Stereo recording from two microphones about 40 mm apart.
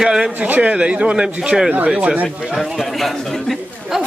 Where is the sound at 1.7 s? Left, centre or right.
Right.